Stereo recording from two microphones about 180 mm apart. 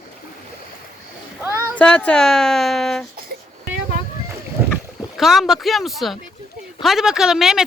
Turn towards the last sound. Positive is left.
turn(degrees=0)  # may be behind; listen again after turning